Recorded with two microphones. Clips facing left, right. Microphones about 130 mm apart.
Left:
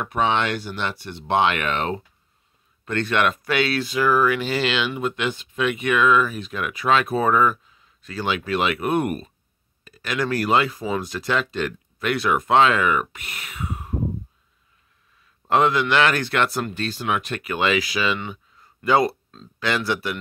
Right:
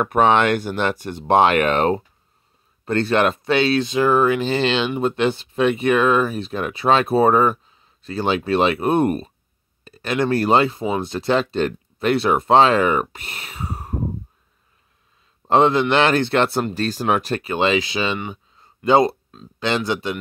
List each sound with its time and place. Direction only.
0.0 s speech: 50° right (ahead or behind)
15.4 s speech: 25° right (ahead or behind)
16.8 s speech: 40° right (ahead or behind)
18.3 s a sound: 25° right (ahead or behind)
19.6 s speech: 25° right (ahead or behind)